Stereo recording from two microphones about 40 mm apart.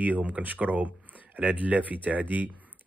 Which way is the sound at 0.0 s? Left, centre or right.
Right.